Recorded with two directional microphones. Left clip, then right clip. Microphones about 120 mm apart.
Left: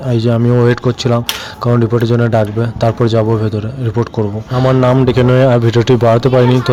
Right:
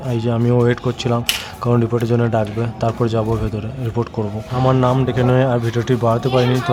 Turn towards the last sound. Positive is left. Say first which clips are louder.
# left 7 dB
turn(degrees=45)  # may be behind; listen again after turning